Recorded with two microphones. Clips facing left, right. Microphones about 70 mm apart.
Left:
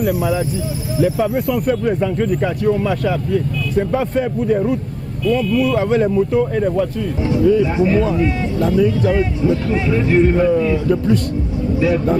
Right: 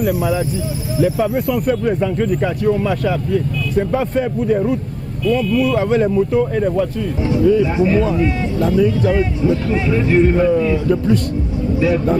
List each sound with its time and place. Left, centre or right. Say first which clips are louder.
0.0 s speech: even; centre